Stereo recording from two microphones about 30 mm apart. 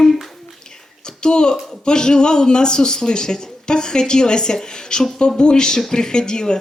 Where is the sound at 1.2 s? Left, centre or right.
Left.